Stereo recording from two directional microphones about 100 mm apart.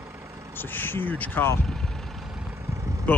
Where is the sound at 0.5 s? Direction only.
20° left (ahead or behind).